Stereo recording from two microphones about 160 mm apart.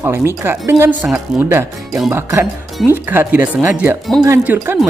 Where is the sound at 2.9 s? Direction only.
10° right (ahead or behind).